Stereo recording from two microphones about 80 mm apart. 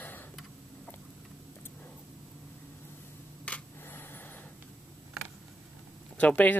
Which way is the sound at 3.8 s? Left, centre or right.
Left.